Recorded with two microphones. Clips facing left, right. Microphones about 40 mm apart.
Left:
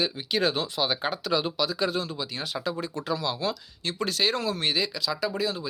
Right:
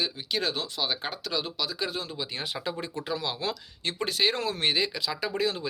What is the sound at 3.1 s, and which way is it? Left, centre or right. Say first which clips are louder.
Speech: left 3 dB; centre.